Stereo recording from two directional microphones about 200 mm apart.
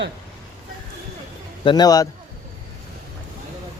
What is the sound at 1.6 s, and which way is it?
Speech, 20° left (ahead or behind).